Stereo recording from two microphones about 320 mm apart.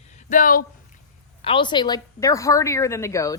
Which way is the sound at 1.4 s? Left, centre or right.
Centre.